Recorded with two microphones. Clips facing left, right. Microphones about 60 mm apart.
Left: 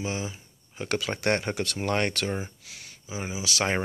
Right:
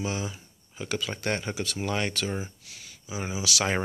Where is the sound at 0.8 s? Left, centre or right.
Left.